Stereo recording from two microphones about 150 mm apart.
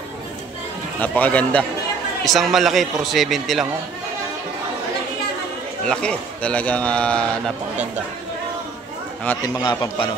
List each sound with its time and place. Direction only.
1.0 s a man's voice: 10° left (ahead or behind)
5.9 s a man's voice: 5° left (ahead or behind)
9.2 s a man's voice: 15° left (ahead or behind)
9.6 s a man's voice: 30° left (ahead or behind)